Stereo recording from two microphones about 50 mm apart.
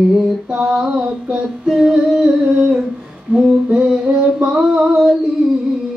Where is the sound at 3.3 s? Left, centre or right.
Centre.